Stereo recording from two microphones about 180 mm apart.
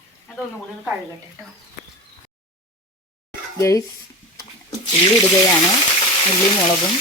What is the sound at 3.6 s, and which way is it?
Speech, 15° left (ahead or behind).